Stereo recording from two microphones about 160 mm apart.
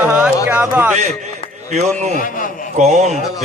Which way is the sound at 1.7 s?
50° right (ahead or behind).